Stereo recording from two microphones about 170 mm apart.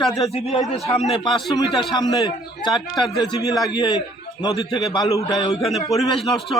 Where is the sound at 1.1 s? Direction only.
30° left (ahead or behind).